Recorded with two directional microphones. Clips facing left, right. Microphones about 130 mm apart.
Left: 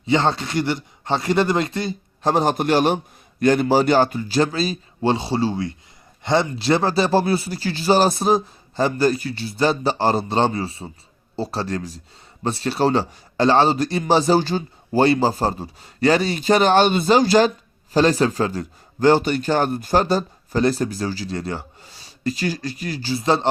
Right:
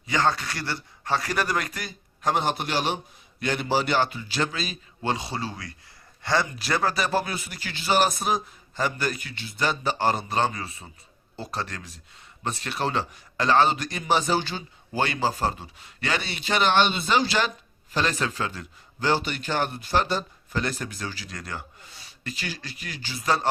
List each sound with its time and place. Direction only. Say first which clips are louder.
0.0 s a man's voice: left 5 dB; 25° left (ahead or behind)